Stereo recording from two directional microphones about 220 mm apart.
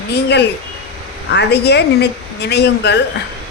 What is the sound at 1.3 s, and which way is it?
Speech, 50° left (ahead or behind).